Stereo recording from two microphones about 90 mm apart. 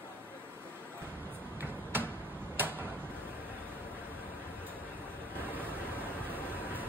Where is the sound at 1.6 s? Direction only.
25° right (ahead or behind).